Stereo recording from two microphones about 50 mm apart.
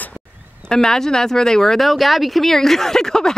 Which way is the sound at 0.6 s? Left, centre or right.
Centre.